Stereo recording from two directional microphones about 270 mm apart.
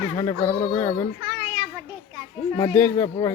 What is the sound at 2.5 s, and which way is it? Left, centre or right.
Speech, centre.